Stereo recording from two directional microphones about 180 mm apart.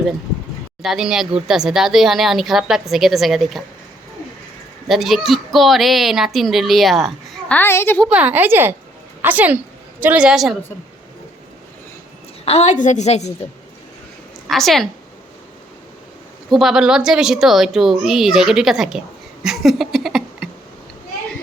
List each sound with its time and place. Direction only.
0.8 s a child's voice: centre (ahead or behind)
4.9 s a child's voice: centre (ahead or behind)
8.0 s a child's voice: 5° right (ahead or behind)
12.5 s a woman's voice: 35° left (ahead or behind)
14.4 s a woman's voice: centre (ahead or behind)
16.5 s a child's voice: centre (ahead or behind)